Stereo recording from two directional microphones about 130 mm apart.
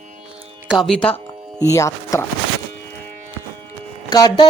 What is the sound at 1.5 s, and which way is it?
Speech, 25° left (ahead or behind).